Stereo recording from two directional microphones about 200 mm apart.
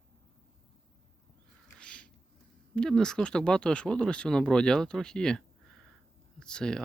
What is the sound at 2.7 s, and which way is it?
Speech, 5° left (ahead or behind).